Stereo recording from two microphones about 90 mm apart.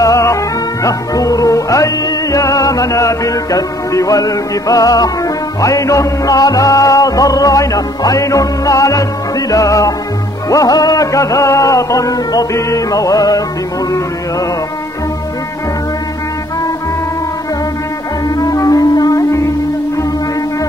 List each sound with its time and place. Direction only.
0.0 s music: 40° left (ahead or behind)
18.3 s music: 40° left (ahead or behind)